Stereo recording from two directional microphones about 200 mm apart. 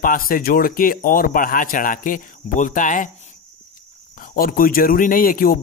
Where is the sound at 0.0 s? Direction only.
45° left (ahead or behind).